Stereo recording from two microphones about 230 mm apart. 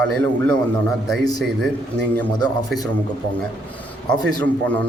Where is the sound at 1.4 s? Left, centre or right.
Centre.